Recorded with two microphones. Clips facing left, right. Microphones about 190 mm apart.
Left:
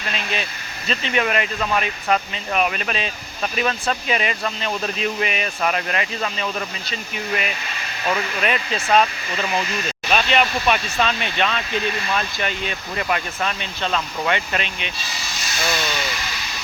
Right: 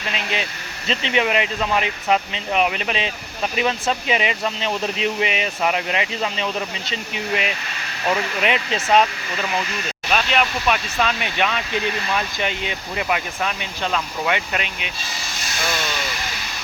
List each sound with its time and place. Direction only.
0.1 s speech: 20° right (ahead or behind)
10.1 s speech: centre (ahead or behind)
11.0 s speech: 10° right (ahead or behind)